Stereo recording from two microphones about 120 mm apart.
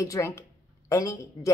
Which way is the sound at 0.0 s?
25° left (ahead or behind).